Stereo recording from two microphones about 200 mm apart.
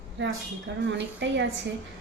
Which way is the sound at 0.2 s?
65° right (ahead or behind).